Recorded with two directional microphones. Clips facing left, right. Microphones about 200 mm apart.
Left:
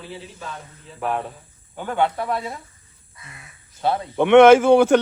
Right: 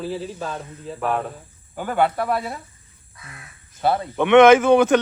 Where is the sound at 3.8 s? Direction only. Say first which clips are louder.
Right 2 dB; 5° right (ahead or behind).